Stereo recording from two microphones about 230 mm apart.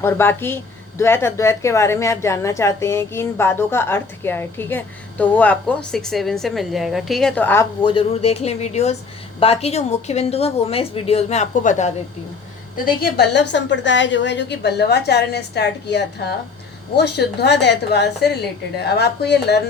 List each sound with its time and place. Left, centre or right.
0.0 s a woman's voice: centre; by 11.9 s left
13.0 s a woman's voice: left